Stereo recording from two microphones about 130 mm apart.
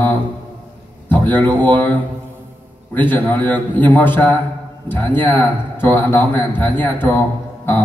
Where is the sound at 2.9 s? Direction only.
15° left (ahead or behind).